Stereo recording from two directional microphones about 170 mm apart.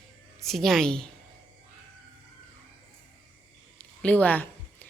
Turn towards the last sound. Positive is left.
turn(degrees=10)  # may be behind; listen again after turning